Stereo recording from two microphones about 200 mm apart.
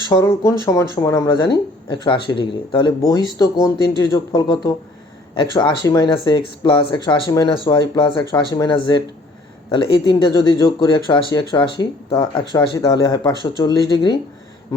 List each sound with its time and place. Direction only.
0.1 s speech: 15° left (ahead or behind)